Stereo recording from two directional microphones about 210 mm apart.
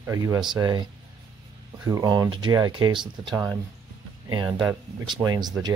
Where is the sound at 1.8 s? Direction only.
15° right (ahead or behind).